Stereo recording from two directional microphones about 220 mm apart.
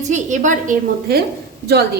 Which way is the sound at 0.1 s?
35° right (ahead or behind).